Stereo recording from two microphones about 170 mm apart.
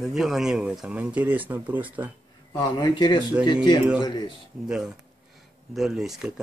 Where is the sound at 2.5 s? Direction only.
25° left (ahead or behind).